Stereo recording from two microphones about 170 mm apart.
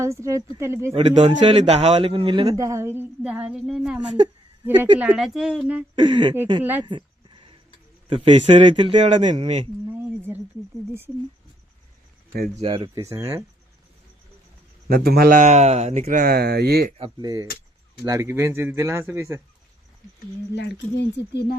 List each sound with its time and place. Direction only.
0.0 s speech: 15° right (ahead or behind)
0.9 s a man's voice: 45° right (ahead or behind); by 5.8 s 5° right (ahead or behind)
6.0 s a man's voice: 25° right (ahead or behind)
6.6 s speech: 10° right (ahead or behind)
6.8 s a sound: 30° right (ahead or behind)
8.1 s speech: 35° right (ahead or behind)
9.0 s a man's voice: 45° right (ahead or behind)
10.2 s speech: 10° right (ahead or behind)
12.5 s speech: 30° right (ahead or behind)
13.0 s speech: 20° right (ahead or behind)
14.8 s a man's voice: 65° right (ahead or behind); by 16.0 s 40° right (ahead or behind)
16.0 s speech: 60° right (ahead or behind)
17.0 s a man's voice: 25° right (ahead or behind)
20.6 s speech: 90° left; by 21.6 s 70° left (ahead or behind)